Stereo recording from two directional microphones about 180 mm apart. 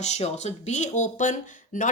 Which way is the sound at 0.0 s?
40° left (ahead or behind).